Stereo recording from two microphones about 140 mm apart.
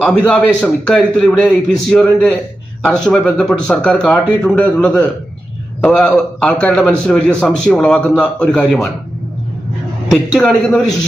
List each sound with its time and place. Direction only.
0.0 s a man's voice: 5° left (ahead or behind)
10.1 s a man's voice: 5° left (ahead or behind)